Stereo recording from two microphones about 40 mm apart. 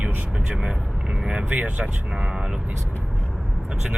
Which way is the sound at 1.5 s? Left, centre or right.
Right.